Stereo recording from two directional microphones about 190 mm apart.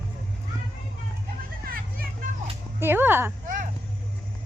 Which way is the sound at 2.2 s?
45° right (ahead or behind).